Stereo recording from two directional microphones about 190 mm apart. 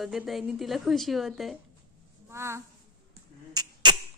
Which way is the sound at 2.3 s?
15° right (ahead or behind).